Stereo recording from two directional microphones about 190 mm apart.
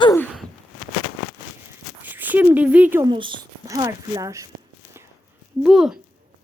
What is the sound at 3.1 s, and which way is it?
Speech, 25° right (ahead or behind).